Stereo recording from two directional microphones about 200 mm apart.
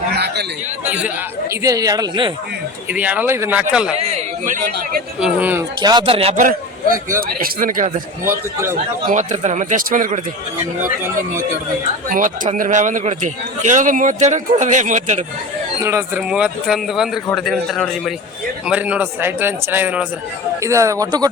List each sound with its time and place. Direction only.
0.9 s speech: 10° right (ahead or behind)
2.9 s speech: 5° right (ahead or behind)
3.9 s speech: 35° right (ahead or behind)
5.2 s speech: 10° right (ahead or behind)
5.8 s speech: 20° right (ahead or behind)
6.3 s a man's voice: 40° right (ahead or behind)
8.2 s speech: 15° right (ahead or behind)
9.0 s a man's voice: 35° right (ahead or behind)
12.0 s a man's voice: 40° right (ahead or behind)
15.8 s a man's voice: 15° right (ahead or behind)